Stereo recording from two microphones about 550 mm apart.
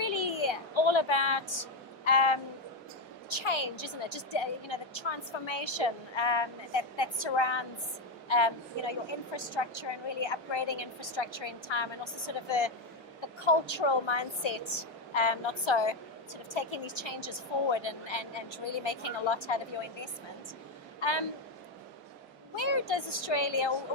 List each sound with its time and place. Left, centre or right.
0.0 s a sound: left
2.0 s a woman's voice: left
21.0 s a woman's voice: left
22.5 s a woman's voice: left